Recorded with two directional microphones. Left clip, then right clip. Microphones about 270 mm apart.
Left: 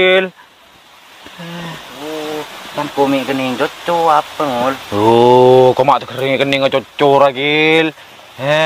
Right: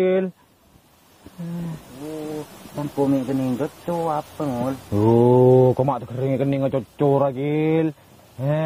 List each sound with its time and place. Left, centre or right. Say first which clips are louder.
0.0 s speech: left 9 dB; centre
1.6 s speech: left 11 dB; centre
5.9 s speech: left 11 dB; centre